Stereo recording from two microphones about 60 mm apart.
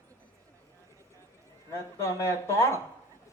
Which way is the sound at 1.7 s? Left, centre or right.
Left.